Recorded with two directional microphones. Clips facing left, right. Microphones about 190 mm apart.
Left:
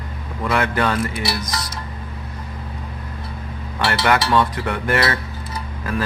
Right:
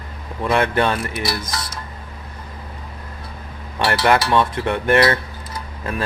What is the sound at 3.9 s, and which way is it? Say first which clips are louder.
Speech: right 2 dB; 25° right (ahead or behind).